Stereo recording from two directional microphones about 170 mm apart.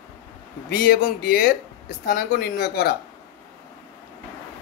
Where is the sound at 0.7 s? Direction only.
65° left (ahead or behind).